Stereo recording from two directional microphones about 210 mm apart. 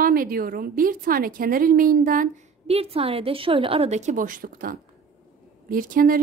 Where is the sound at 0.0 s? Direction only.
45° right (ahead or behind).